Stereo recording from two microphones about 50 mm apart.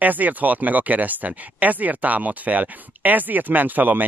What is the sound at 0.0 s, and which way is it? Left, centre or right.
Speech, right.